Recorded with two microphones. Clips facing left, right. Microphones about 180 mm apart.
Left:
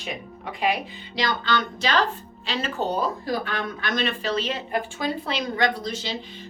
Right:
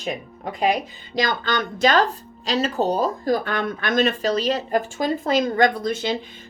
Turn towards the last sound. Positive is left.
turn(degrees=-55)  # may be behind; listen again after turning